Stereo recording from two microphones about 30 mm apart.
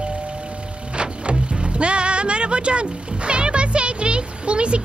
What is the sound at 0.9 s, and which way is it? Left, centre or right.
Music, right.